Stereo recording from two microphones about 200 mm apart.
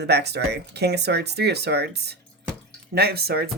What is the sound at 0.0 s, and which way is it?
Speech, 55° right (ahead or behind).